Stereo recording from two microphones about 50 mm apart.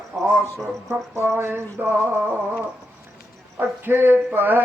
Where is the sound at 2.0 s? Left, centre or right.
Right.